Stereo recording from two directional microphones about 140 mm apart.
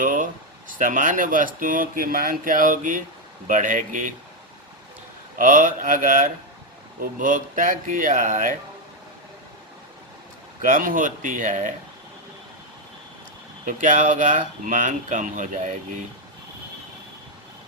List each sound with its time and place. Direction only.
0.0 s a sound: 70° right (ahead or behind)
0.8 s speech: 65° right (ahead or behind)
5.4 s speech: 75° right (ahead or behind)
10.6 s speech: 75° right (ahead or behind)
13.7 s speech: 70° right (ahead or behind)